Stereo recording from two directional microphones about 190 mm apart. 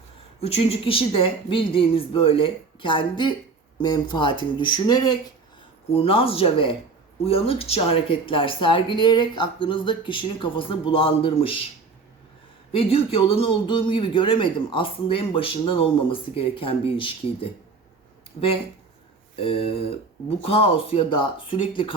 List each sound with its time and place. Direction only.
0.3 s speech: 30° left (ahead or behind)
12.7 s speech: 30° left (ahead or behind)